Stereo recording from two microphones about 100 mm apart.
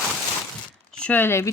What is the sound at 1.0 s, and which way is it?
Speech, 20° left (ahead or behind).